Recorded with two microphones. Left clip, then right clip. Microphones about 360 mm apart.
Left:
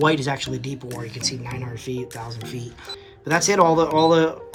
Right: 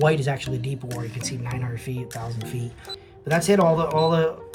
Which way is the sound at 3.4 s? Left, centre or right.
Centre.